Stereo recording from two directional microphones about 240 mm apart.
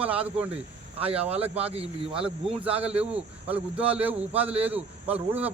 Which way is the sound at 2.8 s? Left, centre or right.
Centre.